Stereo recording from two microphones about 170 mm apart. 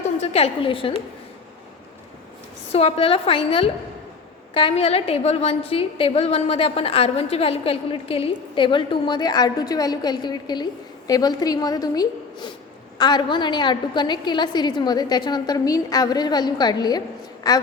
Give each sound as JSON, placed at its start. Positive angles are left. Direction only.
{"t": 0.2, "sound": "a woman's voice", "side_deg": 35}
{"t": 2.7, "sound": "a woman's voice", "side_deg": 35}